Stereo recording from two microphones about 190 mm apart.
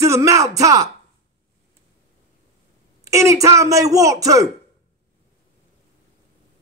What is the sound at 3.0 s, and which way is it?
Speech, 15° right (ahead or behind).